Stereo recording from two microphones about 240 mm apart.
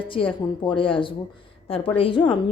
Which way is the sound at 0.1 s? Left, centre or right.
Left.